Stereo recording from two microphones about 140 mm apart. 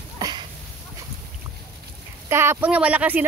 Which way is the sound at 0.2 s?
30° right (ahead or behind).